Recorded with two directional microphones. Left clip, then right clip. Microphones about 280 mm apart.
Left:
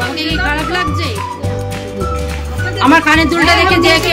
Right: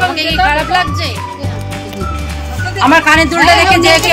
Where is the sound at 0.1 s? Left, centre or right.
Centre.